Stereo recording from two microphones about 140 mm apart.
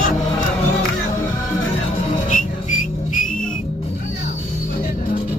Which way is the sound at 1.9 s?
60° left (ahead or behind).